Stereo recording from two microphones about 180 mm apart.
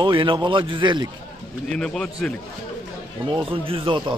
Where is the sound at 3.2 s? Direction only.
30° right (ahead or behind).